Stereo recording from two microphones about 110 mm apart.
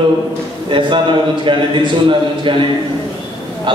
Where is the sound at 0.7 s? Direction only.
50° right (ahead or behind).